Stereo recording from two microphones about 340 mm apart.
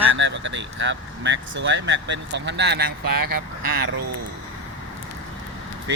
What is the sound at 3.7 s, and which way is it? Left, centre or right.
Speech, right.